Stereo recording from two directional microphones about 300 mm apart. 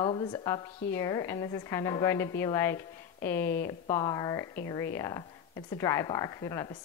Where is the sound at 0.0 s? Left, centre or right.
Centre.